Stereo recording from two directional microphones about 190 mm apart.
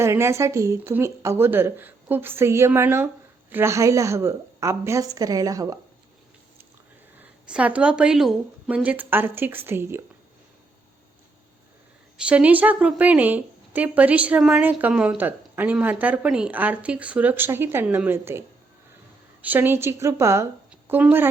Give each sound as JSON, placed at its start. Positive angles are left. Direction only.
{"t": 0.0, "sound": "a woman's voice", "side_deg": -15}
{"t": 7.2, "sound": "a woman's voice", "side_deg": -5}
{"t": 12.1, "sound": "a woman's voice", "side_deg": -5}